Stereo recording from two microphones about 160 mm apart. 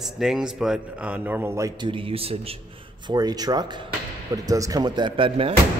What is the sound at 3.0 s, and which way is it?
A man's voice, 25° right (ahead or behind).